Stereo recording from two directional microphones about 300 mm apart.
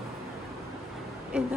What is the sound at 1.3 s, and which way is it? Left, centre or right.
Speech, centre.